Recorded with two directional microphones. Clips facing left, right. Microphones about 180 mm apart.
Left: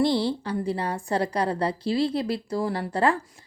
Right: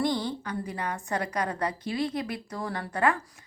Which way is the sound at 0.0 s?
30° left (ahead or behind).